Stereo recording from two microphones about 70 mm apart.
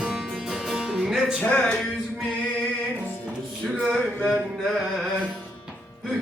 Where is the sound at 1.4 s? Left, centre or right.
Centre.